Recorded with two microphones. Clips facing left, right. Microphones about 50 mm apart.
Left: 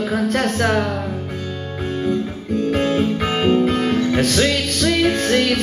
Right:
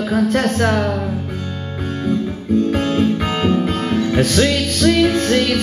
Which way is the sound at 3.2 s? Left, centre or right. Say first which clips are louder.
Left 1 dB; centre.